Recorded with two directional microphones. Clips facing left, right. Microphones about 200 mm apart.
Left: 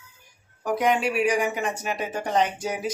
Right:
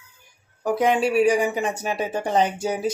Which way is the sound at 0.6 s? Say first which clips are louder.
Right 3 dB; 30° right (ahead or behind).